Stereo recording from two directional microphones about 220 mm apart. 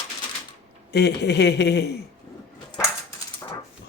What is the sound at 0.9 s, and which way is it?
Speech, 50° left (ahead or behind).